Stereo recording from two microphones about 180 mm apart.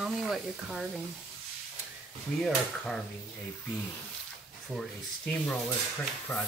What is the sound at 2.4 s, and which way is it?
Speech, centre (ahead or behind).